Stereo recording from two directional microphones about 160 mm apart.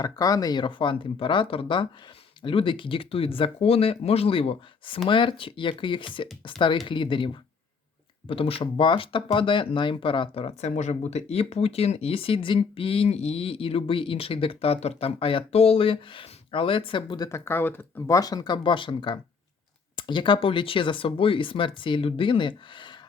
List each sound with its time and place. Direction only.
0.0 s speech: 25° left (ahead or behind)
8.3 s speech: 35° left (ahead or behind)